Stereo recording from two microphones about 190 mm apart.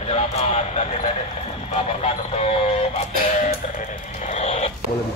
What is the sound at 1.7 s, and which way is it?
Vehicle, 30° left (ahead or behind).